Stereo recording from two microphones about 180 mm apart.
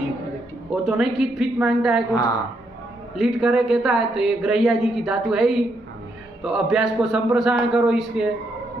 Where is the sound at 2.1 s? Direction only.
25° left (ahead or behind).